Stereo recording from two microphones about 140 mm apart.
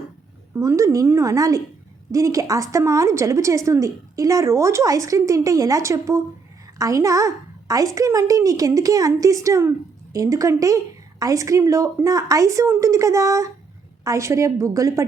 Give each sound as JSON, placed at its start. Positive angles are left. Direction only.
{"t": 0.5, "sound": "a woman's voice", "side_deg": -20}